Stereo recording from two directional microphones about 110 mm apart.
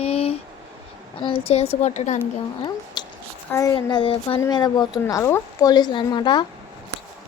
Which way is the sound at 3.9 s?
45° left (ahead or behind).